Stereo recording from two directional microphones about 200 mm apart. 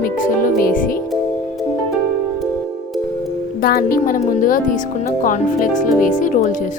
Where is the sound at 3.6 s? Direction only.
45° left (ahead or behind).